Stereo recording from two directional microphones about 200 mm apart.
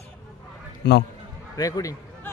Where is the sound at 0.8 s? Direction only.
60° left (ahead or behind).